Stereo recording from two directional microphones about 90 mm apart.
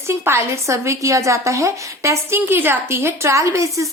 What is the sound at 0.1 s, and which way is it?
A woman's voice, 30° right (ahead or behind).